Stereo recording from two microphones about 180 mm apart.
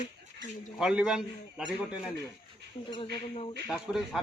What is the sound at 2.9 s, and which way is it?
Speech, 30° left (ahead or behind).